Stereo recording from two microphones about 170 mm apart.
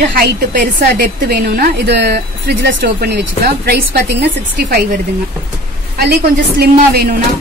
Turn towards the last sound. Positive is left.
turn(degrees=-70)  # may be behind; listen again after turning